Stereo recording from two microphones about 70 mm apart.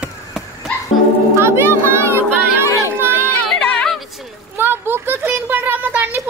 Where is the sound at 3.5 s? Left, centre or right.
Left.